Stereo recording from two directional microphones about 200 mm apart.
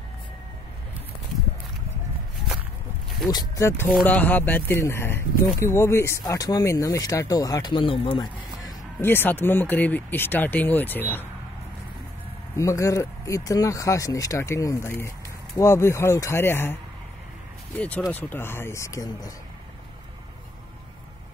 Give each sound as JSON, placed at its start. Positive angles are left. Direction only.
{"t": 3.3, "sound": "speech", "side_deg": 20}
{"t": 9.0, "sound": "speech", "side_deg": 10}
{"t": 12.5, "sound": "speech", "side_deg": 15}
{"t": 17.7, "sound": "speech", "side_deg": 10}